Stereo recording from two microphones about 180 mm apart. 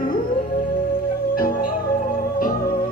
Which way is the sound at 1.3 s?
50° left (ahead or behind).